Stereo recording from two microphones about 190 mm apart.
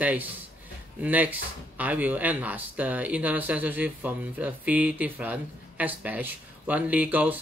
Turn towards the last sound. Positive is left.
turn(degrees=-10)  # may be behind; listen again after turning